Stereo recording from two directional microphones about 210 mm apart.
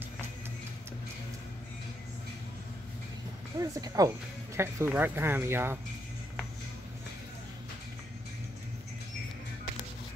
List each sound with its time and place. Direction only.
3.5 s speech: 15° right (ahead or behind)